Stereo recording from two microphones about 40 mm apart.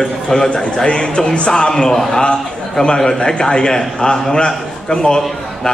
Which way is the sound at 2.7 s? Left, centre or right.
Centre.